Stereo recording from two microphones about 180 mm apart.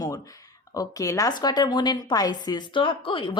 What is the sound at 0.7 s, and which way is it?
A woman's voice, 20° left (ahead or behind).